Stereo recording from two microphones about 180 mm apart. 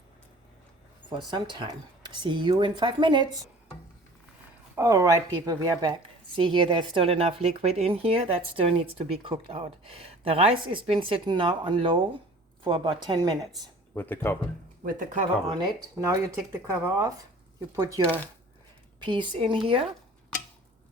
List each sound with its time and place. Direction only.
1.3 s speech: 25° right (ahead or behind)
4.7 s a woman's voice: 15° right (ahead or behind)
13.9 s speech: 10° left (ahead or behind)
14.8 s speech: 45° right (ahead or behind)
15.4 s speech: 25° right (ahead or behind)